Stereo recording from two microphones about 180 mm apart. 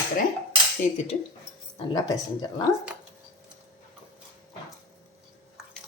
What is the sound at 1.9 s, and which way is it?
Speech, 20° left (ahead or behind).